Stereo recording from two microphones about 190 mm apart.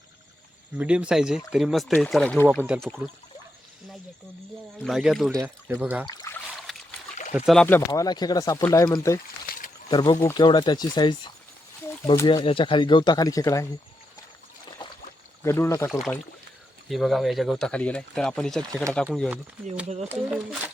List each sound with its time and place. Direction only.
0.8 s speech: 5° right (ahead or behind)
2.6 s speech: 10° right (ahead or behind)
4.8 s speech: centre (ahead or behind)
5.3 s speech: 10° right (ahead or behind)
6.1 s speech: 15° left (ahead or behind)
6.7 s a sound: centre (ahead or behind)
7.3 s speech: centre (ahead or behind)
7.9 s speech: 20° left (ahead or behind)
14.8 s a sound: 25° left (ahead or behind)
15.4 s speech: 15° left (ahead or behind)
15.9 s speech: centre (ahead or behind)
20.1 s speech: 5° right (ahead or behind)